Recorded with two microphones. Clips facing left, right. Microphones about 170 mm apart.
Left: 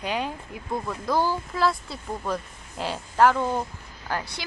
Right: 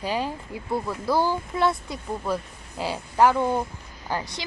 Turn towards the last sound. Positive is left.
turn(degrees=-15)  # may be behind; listen again after turning